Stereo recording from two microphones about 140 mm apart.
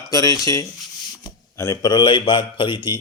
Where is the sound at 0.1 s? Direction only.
25° left (ahead or behind).